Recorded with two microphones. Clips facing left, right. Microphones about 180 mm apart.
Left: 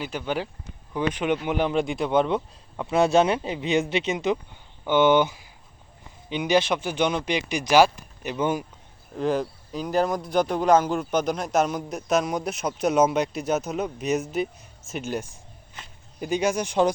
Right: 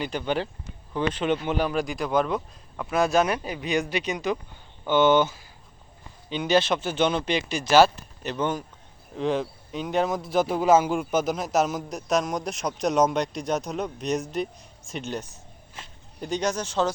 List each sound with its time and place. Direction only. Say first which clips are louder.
0.0 s speech: right 1 dB; 5° left (ahead or behind)